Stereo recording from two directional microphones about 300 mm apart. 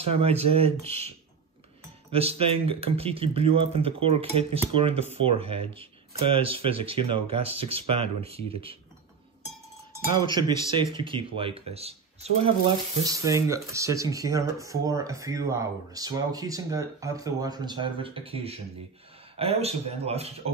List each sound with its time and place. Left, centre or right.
0.0 s speech: centre
10.7 s speech: centre